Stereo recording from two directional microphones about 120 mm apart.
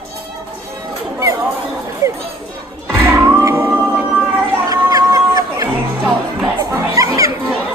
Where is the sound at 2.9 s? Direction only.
15° right (ahead or behind).